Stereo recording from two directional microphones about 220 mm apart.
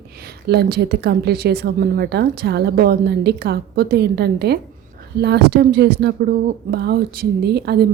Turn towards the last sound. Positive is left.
turn(degrees=-45)  # may be behind; listen again after turning